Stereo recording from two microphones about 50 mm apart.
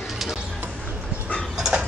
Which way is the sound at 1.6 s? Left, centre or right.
Centre.